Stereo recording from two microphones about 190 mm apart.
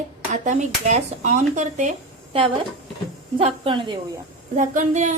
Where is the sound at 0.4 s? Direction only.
40° right (ahead or behind).